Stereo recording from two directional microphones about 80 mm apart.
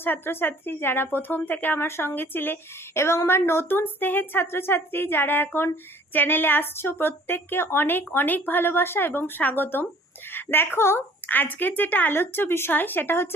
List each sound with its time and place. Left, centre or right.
0.0 s a woman's voice: left